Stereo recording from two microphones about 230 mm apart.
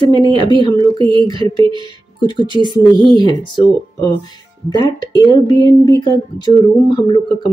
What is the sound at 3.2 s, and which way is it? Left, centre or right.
Speech, centre.